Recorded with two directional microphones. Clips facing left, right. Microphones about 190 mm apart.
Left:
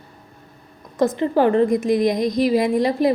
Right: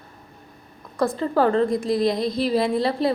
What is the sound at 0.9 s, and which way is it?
A woman's voice, 20° left (ahead or behind).